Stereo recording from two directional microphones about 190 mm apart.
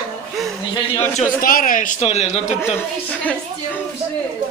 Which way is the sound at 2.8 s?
10° left (ahead or behind).